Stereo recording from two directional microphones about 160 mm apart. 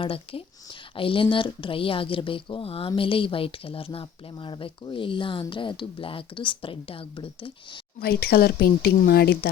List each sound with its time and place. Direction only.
0.0 s speech: 35° left (ahead or behind)
7.9 s speech: 70° left (ahead or behind)